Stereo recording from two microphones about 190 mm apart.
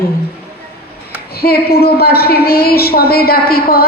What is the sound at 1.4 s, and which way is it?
A woman's voice, 55° left (ahead or behind).